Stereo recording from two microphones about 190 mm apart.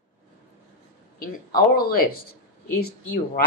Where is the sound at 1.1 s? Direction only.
50° left (ahead or behind).